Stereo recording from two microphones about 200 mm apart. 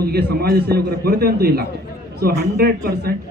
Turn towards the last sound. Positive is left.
turn(degrees=-55)  # may be behind; listen again after turning